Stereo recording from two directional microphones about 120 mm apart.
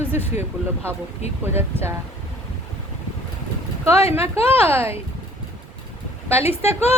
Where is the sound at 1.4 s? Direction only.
20° right (ahead or behind).